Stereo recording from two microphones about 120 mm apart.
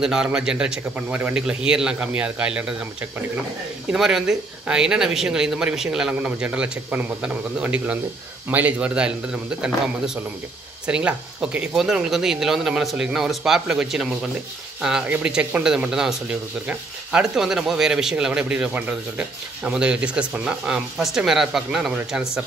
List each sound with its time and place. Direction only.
0.0 s speech: 5° right (ahead or behind)